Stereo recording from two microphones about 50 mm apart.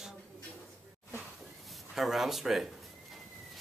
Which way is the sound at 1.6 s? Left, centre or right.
Centre.